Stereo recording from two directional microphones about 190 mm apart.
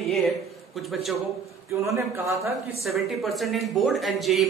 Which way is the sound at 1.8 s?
15° right (ahead or behind).